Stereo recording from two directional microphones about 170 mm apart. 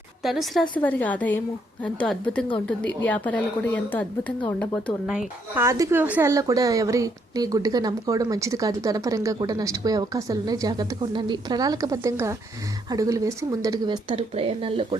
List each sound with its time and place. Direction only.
0.2 s a woman's voice: centre (ahead or behind)
5.5 s a woman's voice: 20° right (ahead or behind)